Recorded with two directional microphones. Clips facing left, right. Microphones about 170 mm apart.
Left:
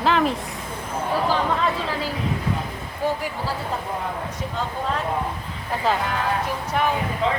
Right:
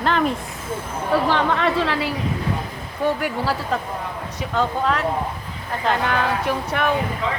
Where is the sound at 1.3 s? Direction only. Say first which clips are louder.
Right 2 dB; 75° right (ahead or behind).